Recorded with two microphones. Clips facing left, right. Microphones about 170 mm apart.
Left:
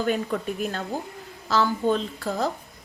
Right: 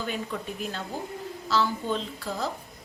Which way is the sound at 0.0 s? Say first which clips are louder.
Left 7 dB; 50° left (ahead or behind).